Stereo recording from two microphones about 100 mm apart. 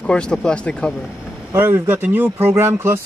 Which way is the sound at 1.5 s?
25° right (ahead or behind).